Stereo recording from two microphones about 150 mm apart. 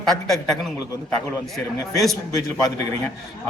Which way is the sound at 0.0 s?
Centre (ahead or behind).